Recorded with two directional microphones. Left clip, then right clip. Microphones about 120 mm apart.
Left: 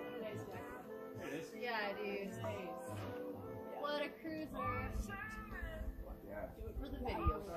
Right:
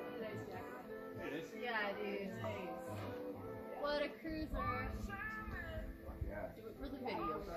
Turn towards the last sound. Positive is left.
turn(degrees=15)  # may be behind; listen again after turning